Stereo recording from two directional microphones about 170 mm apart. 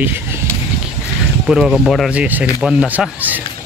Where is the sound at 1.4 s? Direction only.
5° right (ahead or behind).